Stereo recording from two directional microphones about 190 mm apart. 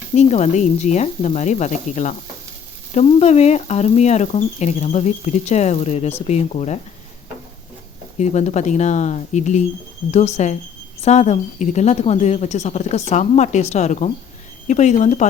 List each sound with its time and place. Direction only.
0.2 s frying: 35° left (ahead or behind)
8.2 s frying: 35° left (ahead or behind)